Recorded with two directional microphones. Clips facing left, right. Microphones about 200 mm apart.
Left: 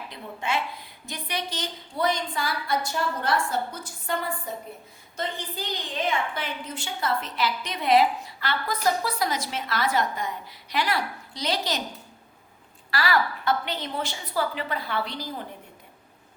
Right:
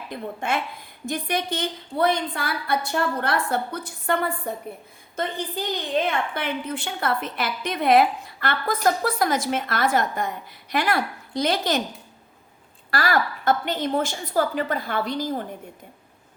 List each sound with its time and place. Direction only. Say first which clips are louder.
0.1 s a woman's voice: right 3 dB; 50° right (ahead or behind)
12.9 s a woman's voice: right 2 dB; 45° right (ahead or behind)